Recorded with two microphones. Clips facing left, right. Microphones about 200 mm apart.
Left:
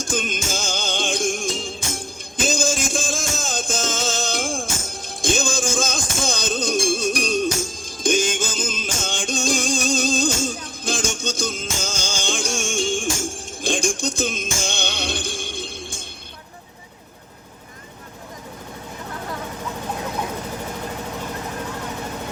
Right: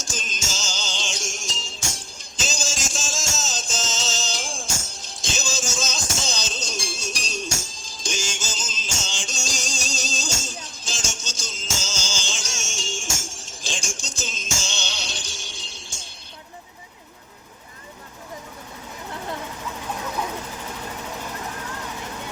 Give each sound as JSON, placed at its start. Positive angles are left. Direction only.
{"t": 0.0, "sound": "music", "side_deg": 55}